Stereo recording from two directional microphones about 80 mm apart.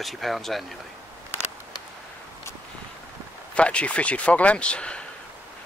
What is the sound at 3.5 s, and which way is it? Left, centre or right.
A man's voice, centre.